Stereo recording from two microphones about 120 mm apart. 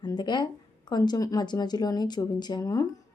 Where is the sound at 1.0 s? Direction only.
30° left (ahead or behind).